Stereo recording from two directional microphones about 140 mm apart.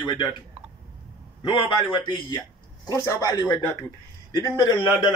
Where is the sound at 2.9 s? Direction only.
20° left (ahead or behind).